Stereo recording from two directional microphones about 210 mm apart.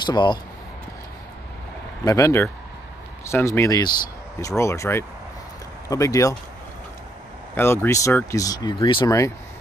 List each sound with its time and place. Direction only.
0.0 s speech: 20° left (ahead or behind)
2.0 s speech: 15° left (ahead or behind)
7.5 s speech: 10° left (ahead or behind)